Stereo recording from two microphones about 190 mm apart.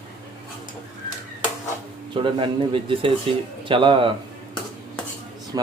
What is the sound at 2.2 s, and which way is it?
Speech, 25° right (ahead or behind).